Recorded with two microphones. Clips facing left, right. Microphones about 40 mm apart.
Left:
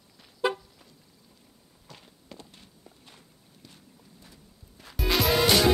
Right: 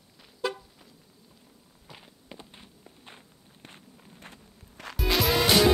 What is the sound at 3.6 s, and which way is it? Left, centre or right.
Walk, right.